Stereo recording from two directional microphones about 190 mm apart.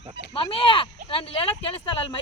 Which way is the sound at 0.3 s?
30° left (ahead or behind).